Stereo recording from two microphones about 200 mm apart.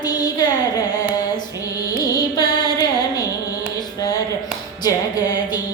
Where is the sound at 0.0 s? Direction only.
20° left (ahead or behind).